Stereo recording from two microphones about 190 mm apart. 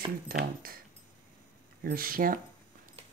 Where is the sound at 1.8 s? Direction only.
50° right (ahead or behind).